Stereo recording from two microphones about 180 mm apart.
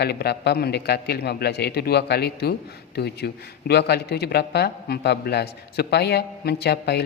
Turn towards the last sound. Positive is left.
turn(degrees=65)  # may be behind; listen again after turning